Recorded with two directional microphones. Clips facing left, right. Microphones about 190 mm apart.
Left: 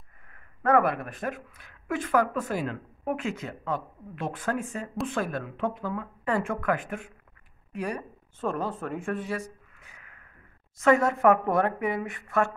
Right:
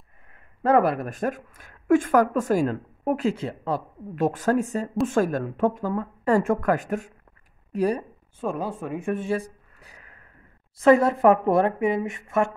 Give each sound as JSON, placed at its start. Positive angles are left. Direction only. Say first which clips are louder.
{"t": 0.6, "sound": "a woman's voice", "louder": "right 3 dB", "side_deg": -30}
{"t": 8.4, "sound": "speech", "louder": "right 2 dB", "side_deg": -10}